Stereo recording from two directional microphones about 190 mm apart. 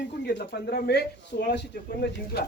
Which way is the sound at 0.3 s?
60° left (ahead or behind).